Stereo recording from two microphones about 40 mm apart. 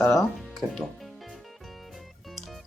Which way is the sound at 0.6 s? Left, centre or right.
Right.